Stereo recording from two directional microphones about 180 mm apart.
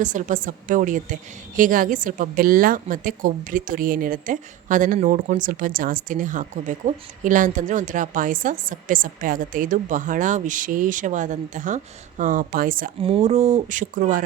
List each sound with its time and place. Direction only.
0.0 s a woman's voice: 45° right (ahead or behind)
13.0 s speech: 30° right (ahead or behind); by 14.3 s 45° right (ahead or behind)